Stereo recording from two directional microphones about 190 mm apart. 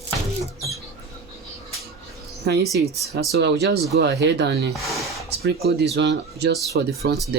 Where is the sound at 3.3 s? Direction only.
65° right (ahead or behind).